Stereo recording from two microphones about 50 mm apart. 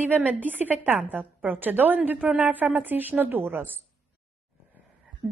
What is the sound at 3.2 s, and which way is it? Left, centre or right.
Speech, right.